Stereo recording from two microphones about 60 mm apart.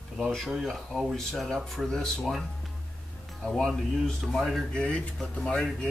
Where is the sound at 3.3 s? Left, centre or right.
Centre.